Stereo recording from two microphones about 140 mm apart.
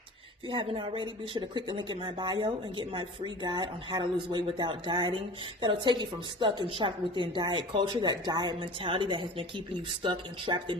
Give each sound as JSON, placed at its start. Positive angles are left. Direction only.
{"t": 0.4, "sound": "speech", "side_deg": -35}